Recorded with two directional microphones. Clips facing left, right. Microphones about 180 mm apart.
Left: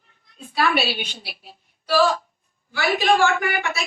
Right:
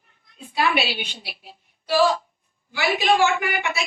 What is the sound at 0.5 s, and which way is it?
A woman's voice, 15° right (ahead or behind).